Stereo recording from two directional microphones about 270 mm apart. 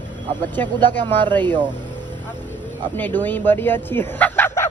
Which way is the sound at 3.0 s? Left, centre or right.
Centre.